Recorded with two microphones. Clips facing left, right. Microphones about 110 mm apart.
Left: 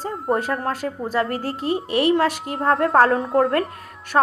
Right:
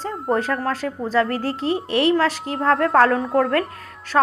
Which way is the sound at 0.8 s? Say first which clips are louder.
Even; 25° left (ahead or behind).